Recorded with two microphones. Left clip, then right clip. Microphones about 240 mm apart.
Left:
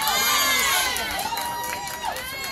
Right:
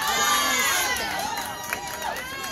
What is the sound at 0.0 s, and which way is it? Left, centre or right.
Crowd, left.